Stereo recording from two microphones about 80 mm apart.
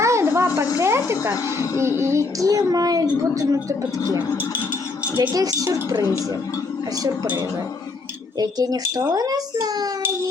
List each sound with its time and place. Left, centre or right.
0.0 s a sound: right
0.8 s a woman's voice: right
5.3 s a woman's voice: right
8.4 s a woman's voice: right